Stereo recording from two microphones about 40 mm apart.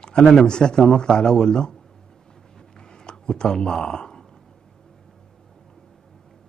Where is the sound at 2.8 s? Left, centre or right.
Centre.